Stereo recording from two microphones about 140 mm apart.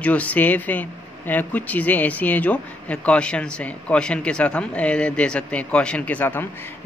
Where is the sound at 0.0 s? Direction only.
10° left (ahead or behind).